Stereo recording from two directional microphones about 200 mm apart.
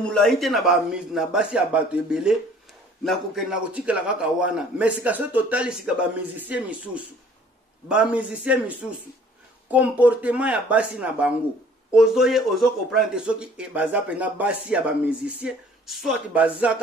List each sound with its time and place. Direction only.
0.0 s a man's voice: 5° left (ahead or behind)